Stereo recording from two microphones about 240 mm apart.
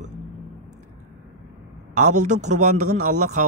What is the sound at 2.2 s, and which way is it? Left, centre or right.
Speech, right.